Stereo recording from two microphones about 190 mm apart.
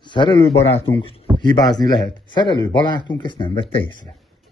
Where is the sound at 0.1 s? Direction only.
25° left (ahead or behind).